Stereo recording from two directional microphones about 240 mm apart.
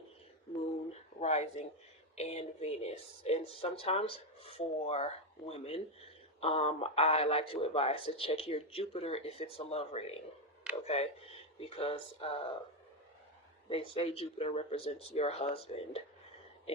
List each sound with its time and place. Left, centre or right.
1.2 s speech: left
13.7 s speech: left